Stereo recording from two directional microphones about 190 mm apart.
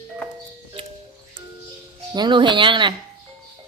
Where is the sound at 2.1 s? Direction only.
25° right (ahead or behind).